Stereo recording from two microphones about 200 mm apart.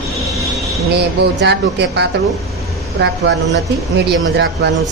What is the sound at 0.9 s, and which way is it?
Speech, 55° right (ahead or behind).